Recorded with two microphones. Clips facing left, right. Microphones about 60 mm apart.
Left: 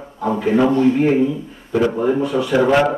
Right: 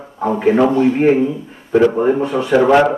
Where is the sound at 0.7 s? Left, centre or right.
Right.